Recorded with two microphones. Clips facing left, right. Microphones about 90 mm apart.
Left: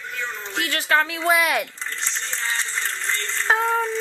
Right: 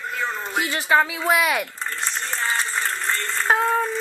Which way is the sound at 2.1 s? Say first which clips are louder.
Right 3 dB; 55° right (ahead or behind).